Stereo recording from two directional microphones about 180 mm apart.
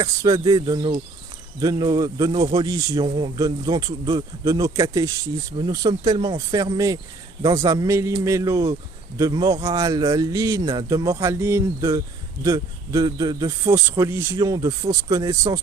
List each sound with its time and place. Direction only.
0.0 s a man's voice: 15° right (ahead or behind)